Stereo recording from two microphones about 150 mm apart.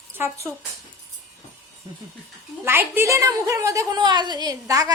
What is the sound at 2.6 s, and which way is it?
A woman's voice, 15° right (ahead or behind).